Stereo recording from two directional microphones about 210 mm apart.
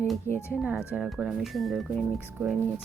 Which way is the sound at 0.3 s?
10° left (ahead or behind).